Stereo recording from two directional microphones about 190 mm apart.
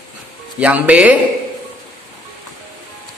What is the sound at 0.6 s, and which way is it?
Speech, 5° right (ahead or behind).